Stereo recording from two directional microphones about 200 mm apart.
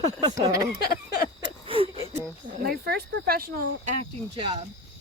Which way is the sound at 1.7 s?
25° right (ahead or behind).